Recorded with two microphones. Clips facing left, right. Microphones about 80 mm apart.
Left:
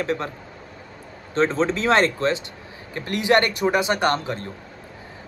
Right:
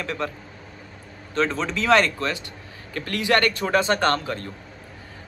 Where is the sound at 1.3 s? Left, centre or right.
Left.